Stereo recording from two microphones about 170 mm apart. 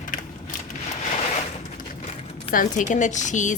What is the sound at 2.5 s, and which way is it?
A woman's voice, 50° left (ahead or behind).